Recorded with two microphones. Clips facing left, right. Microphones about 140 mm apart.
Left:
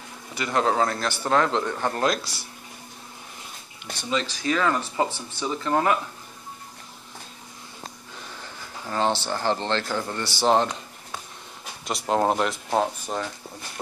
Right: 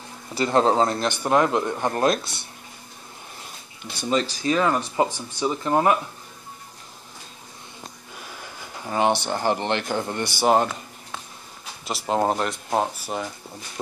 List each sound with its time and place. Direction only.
0.3 s speech: 30° right (ahead or behind)
4.1 s speech: 40° right (ahead or behind)
4.4 s speech: 25° right (ahead or behind)
8.2 s a sound: 10° right (ahead or behind)
8.8 s speech: 15° right (ahead or behind)
11.8 s speech: centre (ahead or behind)